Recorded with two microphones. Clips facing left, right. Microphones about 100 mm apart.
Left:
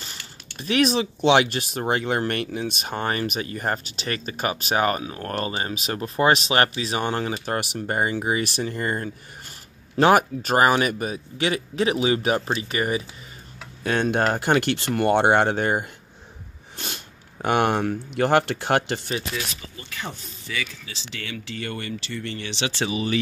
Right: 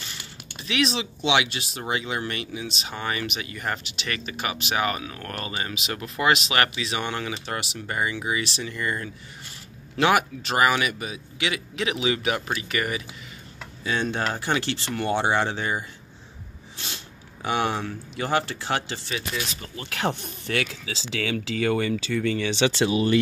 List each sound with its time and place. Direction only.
0.0 s speech: 45° left (ahead or behind)
13.8 s speech: 55° left (ahead or behind)
19.7 s speech: 90° right